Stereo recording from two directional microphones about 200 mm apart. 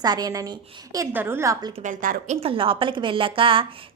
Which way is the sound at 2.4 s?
25° right (ahead or behind).